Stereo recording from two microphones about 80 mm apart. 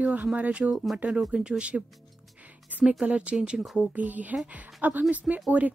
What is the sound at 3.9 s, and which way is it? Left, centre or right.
A woman's voice, centre.